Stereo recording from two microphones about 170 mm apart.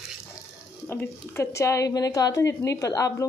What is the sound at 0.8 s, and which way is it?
A woman's voice, 15° left (ahead or behind).